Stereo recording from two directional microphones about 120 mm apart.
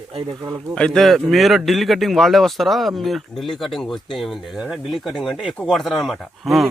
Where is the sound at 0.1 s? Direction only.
50° right (ahead or behind).